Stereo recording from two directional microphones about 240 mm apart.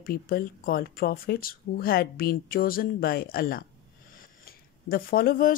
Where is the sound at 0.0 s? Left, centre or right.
Left.